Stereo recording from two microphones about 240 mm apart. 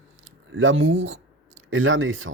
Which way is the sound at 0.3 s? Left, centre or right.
Right.